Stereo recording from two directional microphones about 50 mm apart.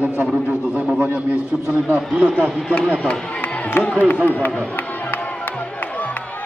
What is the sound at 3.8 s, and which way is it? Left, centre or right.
Speech, left.